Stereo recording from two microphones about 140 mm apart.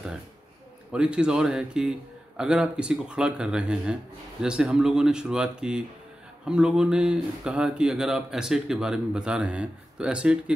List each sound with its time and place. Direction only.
0.9 s a man's voice: 5° right (ahead or behind)